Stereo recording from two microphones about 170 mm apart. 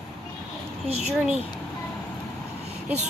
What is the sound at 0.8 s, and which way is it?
Speech, 40° right (ahead or behind).